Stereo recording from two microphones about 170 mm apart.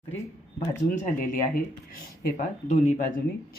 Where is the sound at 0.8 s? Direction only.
50° left (ahead or behind).